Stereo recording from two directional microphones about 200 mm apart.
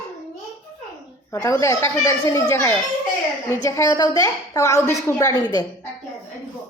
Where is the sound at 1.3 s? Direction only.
15° left (ahead or behind).